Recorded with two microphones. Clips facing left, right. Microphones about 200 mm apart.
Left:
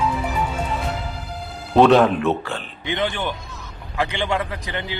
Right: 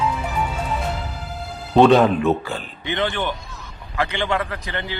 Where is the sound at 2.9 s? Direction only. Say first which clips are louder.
Right 1 dB; 15° left (ahead or behind).